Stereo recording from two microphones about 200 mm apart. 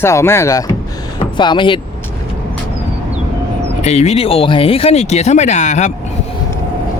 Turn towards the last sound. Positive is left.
turn(degrees=35)  # may be behind; listen again after turning